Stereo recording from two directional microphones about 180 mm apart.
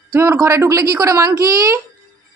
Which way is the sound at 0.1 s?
15° right (ahead or behind).